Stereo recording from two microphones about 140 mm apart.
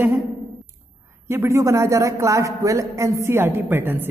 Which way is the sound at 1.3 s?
20° right (ahead or behind).